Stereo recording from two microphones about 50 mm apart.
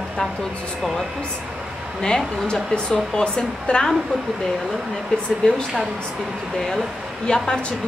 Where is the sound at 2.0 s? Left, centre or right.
Centre.